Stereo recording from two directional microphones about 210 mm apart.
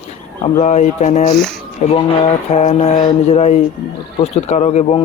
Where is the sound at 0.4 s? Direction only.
35° left (ahead or behind).